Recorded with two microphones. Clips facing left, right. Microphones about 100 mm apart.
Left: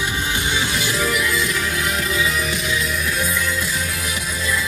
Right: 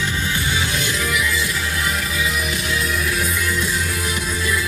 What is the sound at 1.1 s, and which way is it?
Music, 30° left (ahead or behind).